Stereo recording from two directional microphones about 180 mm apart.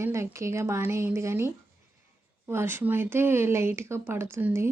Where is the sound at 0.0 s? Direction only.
15° right (ahead or behind).